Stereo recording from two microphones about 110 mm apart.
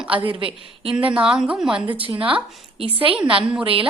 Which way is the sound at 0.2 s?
50° right (ahead or behind).